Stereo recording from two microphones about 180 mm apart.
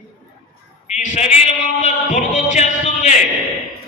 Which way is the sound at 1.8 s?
40° left (ahead or behind).